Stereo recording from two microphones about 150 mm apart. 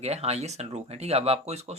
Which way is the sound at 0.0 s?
45° right (ahead or behind).